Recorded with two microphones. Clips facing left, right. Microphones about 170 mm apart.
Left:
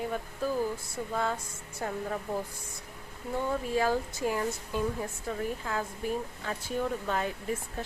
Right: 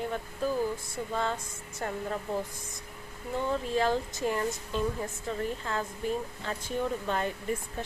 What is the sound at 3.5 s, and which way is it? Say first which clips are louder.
Speech: right 1 dB; 10° left (ahead or behind).